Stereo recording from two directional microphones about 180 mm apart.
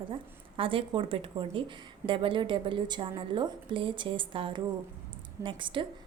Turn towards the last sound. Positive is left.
turn(degrees=-30)  # may be behind; listen again after turning